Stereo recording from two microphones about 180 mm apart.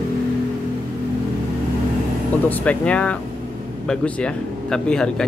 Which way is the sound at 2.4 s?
10° left (ahead or behind).